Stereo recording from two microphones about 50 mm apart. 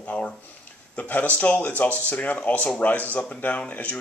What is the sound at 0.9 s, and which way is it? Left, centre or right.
Speech, left.